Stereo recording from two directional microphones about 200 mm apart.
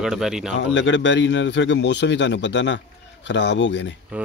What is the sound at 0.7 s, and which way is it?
Speech, 65° left (ahead or behind).